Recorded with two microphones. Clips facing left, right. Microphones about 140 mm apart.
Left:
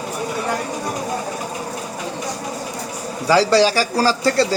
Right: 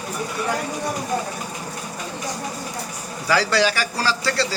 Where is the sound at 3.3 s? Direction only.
30° left (ahead or behind).